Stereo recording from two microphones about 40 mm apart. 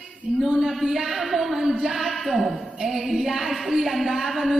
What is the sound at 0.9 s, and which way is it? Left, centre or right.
Speech, centre.